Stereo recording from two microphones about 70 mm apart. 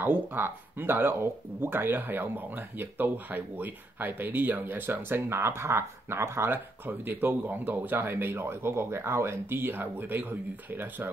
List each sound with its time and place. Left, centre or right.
0.0 s speech: right